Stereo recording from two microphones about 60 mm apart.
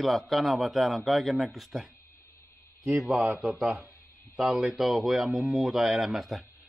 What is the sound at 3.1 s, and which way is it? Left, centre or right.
Speech, right.